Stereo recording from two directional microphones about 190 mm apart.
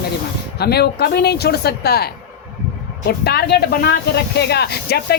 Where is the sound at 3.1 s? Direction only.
60° left (ahead or behind).